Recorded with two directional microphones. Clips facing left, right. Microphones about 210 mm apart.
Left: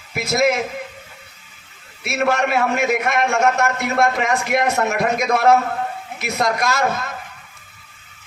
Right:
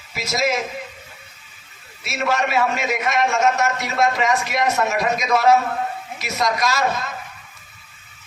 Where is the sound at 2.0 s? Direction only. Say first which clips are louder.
Left 3 dB; 55° left (ahead or behind).